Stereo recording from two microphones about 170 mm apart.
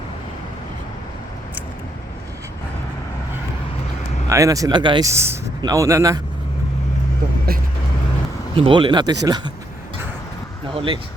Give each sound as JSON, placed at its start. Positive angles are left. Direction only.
{"t": 4.3, "sound": "speech", "side_deg": -20}
{"t": 8.5, "sound": "speech", "side_deg": -30}
{"t": 10.8, "sound": "speech", "side_deg": -30}